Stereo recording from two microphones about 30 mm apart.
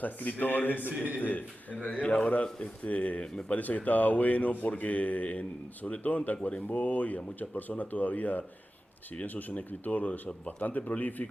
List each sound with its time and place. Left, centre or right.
0.0 s a man's voice: left
1.7 s a man's voice: left
10.4 s speech: left
10.9 s speech: left